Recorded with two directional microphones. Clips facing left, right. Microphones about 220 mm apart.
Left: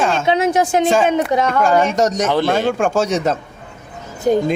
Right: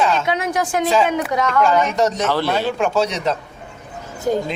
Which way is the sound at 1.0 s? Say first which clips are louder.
Left 4 dB; 25° left (ahead or behind).